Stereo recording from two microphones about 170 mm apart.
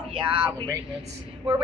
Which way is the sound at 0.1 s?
30° right (ahead or behind).